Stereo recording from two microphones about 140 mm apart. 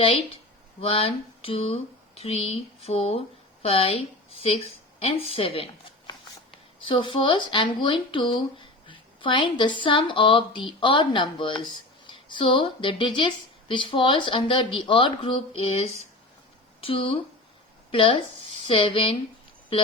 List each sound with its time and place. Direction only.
0.0 s a woman's voice: 40° left (ahead or behind)